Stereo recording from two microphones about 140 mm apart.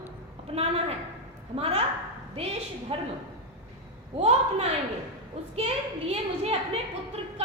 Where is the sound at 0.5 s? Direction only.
45° right (ahead or behind).